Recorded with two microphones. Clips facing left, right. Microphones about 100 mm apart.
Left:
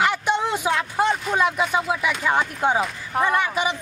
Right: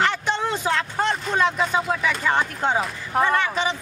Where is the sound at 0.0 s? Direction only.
10° left (ahead or behind).